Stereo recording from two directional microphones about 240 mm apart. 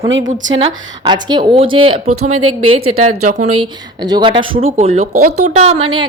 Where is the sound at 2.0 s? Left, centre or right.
Right.